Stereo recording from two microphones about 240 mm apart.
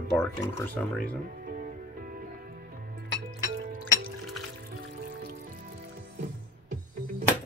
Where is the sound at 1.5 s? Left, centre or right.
Right.